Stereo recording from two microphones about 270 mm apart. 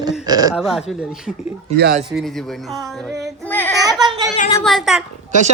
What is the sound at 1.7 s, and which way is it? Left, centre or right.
Speech, right.